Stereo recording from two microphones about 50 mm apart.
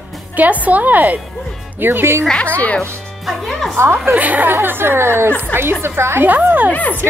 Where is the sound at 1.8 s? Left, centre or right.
Right.